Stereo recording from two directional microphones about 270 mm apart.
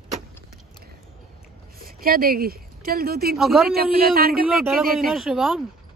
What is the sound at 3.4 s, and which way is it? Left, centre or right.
Speech, centre.